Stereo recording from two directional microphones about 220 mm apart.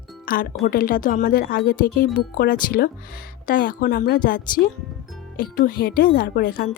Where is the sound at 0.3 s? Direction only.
40° left (ahead or behind).